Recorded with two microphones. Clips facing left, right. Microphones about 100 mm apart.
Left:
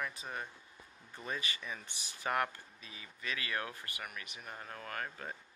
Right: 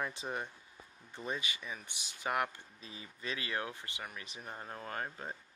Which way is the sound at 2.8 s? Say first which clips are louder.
Right 5 dB; 30° right (ahead or behind).